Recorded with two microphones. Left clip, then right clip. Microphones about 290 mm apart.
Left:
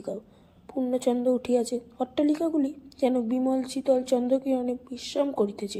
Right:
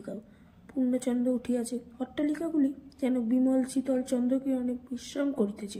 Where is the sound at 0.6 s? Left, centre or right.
Left.